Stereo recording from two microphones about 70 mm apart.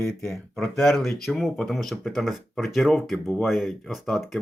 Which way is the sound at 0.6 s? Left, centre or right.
Centre.